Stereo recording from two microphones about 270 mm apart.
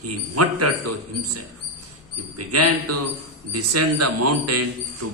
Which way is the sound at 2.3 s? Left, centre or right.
Right.